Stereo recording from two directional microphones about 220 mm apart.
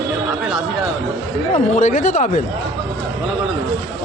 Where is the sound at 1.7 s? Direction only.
35° left (ahead or behind).